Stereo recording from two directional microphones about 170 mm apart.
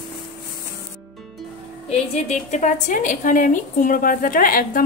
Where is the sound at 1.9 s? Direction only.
40° left (ahead or behind).